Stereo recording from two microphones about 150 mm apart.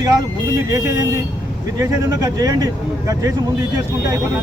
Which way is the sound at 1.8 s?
25° right (ahead or behind).